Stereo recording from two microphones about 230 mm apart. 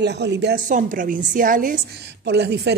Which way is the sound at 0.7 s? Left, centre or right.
Right.